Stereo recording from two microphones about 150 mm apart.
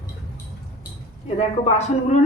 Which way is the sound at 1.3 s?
45° left (ahead or behind).